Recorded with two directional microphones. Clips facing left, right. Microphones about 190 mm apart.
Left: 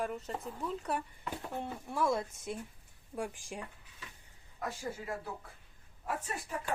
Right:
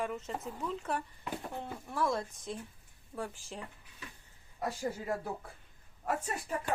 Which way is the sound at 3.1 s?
15° left (ahead or behind).